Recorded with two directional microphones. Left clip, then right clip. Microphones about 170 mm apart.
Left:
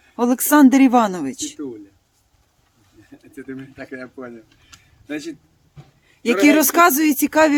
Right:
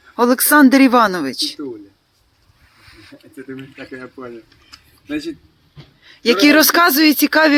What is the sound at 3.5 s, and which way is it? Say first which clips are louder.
Speech: right 1 dB; 50° left (ahead or behind).